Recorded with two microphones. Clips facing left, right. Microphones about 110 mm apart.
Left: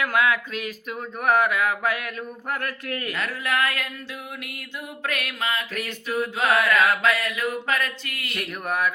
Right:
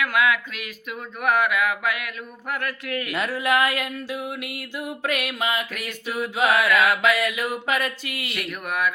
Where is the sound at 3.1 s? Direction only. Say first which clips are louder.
Right 5 dB; 15° right (ahead or behind).